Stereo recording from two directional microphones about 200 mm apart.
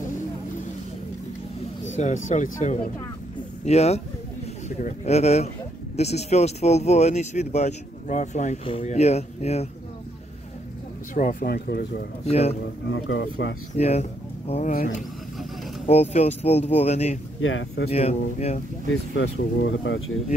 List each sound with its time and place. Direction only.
2.0 s speech: 40° left (ahead or behind)
11.1 s speech: 45° left (ahead or behind)
12.3 s speech: 30° left (ahead or behind)
12.9 s speech: 65° left (ahead or behind)
13.7 s speech: 35° left (ahead or behind)
15.0 s vehicle: centre (ahead or behind)
15.9 s speech: 35° left (ahead or behind)
17.4 s speech: 85° left
17.9 s speech: 30° left (ahead or behind)
19.1 s speech: 80° left